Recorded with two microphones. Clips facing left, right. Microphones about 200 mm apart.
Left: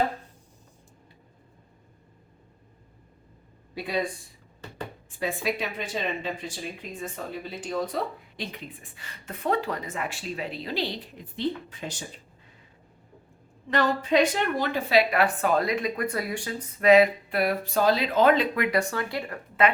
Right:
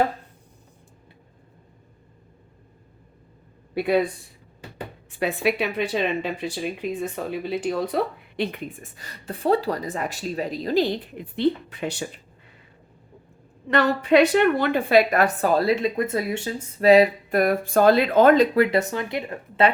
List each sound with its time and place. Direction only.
3.8 s speech: 60° right (ahead or behind)
5.1 s speech: 65° right (ahead or behind)
13.7 s speech: 65° right (ahead or behind); by 18.4 s 50° right (ahead or behind)
18.5 s speech: 35° right (ahead or behind)
18.8 s speech: 20° right (ahead or behind)